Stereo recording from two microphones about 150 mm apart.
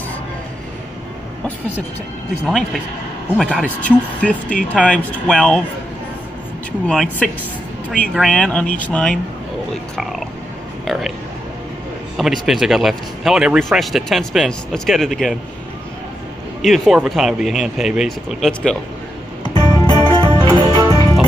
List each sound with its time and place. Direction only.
2.4 s speech: 5° left (ahead or behind)
6.9 s speech: 5° left (ahead or behind)
10.9 s speech: centre (ahead or behind)
12.2 s speech: centre (ahead or behind)
16.6 s speech: centre (ahead or behind)
19.7 s music: 25° left (ahead or behind)
20.2 s music: 25° right (ahead or behind)